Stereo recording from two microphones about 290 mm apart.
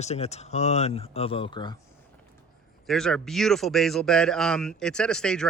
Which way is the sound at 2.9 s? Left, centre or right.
Centre.